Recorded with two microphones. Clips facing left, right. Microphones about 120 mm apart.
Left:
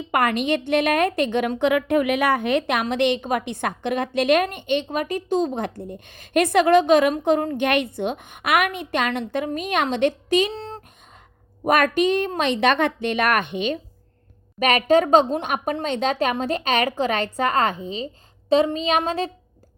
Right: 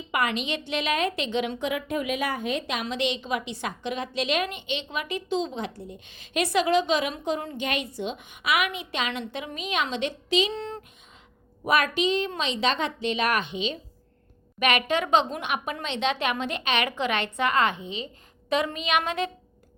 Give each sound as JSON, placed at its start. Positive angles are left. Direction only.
{"t": 0.1, "sound": "a woman's voice", "side_deg": 50}
{"t": 10.5, "sound": "a sound", "side_deg": 35}
{"t": 11.6, "sound": "a woman's voice", "side_deg": 50}
{"t": 14.6, "sound": "speech", "side_deg": 40}